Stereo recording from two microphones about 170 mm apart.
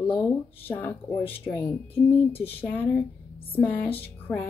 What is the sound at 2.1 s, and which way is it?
Speech, 35° left (ahead or behind).